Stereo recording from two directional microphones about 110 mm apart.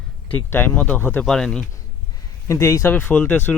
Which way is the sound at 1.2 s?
5° left (ahead or behind).